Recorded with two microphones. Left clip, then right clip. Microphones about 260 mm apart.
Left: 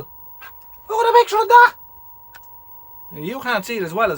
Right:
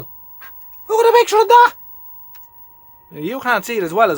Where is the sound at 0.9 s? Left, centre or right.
Right.